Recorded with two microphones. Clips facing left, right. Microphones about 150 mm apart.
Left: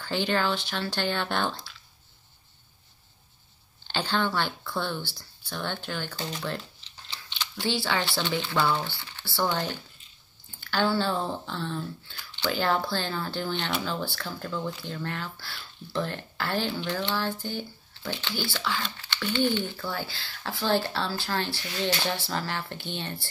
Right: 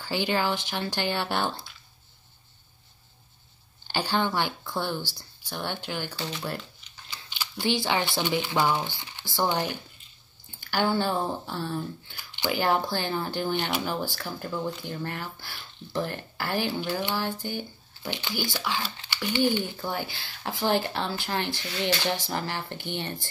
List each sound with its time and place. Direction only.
0.0 s speech: 10° right (ahead or behind)
3.8 s speech: 10° right (ahead or behind)
7.2 s a sound: 5° right (ahead or behind)
7.6 s speech: 20° right (ahead or behind)